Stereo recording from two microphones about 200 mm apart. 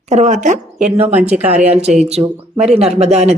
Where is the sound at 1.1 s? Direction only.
10° right (ahead or behind).